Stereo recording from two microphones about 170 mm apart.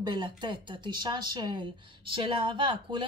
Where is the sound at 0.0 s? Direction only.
25° right (ahead or behind).